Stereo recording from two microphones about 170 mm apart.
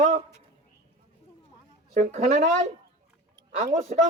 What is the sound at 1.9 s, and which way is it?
A man's voice, 45° right (ahead or behind).